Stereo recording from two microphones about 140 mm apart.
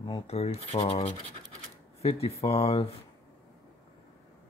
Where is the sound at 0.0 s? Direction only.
45° left (ahead or behind).